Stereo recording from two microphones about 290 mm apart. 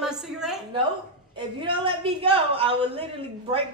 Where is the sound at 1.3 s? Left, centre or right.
Centre.